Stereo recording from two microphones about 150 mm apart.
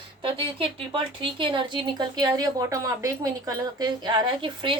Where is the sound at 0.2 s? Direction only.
35° right (ahead or behind).